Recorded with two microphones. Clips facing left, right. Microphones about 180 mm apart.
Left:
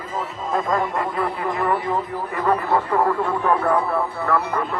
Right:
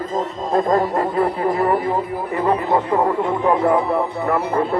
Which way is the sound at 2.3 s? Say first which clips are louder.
Right 2 dB; 15° right (ahead or behind).